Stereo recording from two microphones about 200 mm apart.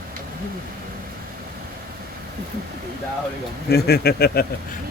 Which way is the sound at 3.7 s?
50° left (ahead or behind).